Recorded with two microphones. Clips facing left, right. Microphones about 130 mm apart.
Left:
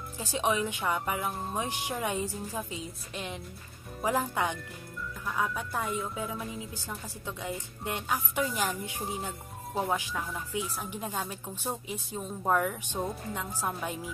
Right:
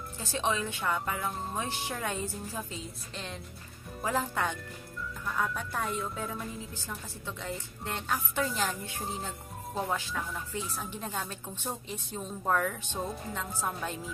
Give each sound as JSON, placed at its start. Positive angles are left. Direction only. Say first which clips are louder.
{"t": 0.2, "sound": "a woman's voice", "louder": "left 2 dB", "side_deg": 15}
{"t": 4.0, "sound": "a woman's voice", "louder": "left 2 dB", "side_deg": 15}
{"t": 5.2, "sound": "a woman's voice", "louder": "left 1 dB", "side_deg": 5}